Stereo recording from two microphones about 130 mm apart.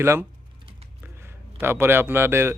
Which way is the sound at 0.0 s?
20° right (ahead or behind).